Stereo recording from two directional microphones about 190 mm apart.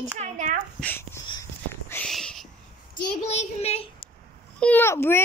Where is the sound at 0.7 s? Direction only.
10° left (ahead or behind).